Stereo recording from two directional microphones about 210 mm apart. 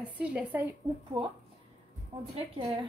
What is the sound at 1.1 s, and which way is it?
Speech, 20° right (ahead or behind).